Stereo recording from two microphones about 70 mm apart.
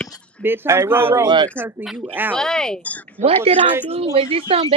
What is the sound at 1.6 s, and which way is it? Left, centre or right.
Speech, centre.